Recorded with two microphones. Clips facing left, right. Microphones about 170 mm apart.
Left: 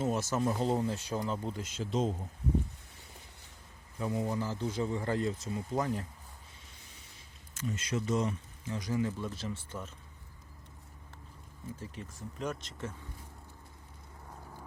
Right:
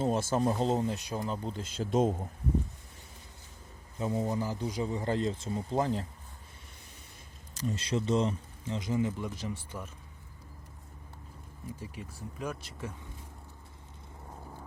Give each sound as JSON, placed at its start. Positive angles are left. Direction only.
{"t": 0.0, "sound": "speech", "side_deg": -30}
{"t": 1.6, "sound": "speech", "side_deg": -35}
{"t": 1.9, "sound": "speech", "side_deg": -55}
{"t": 3.9, "sound": "a man's voice", "side_deg": -25}
{"t": 4.4, "sound": "speech", "side_deg": -15}
{"t": 7.5, "sound": "speech", "side_deg": -35}
{"t": 11.8, "sound": "speech", "side_deg": -10}